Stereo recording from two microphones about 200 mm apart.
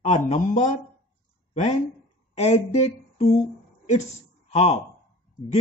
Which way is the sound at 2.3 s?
35° left (ahead or behind).